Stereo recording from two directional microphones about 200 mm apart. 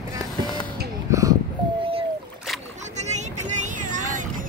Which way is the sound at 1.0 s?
15° right (ahead or behind).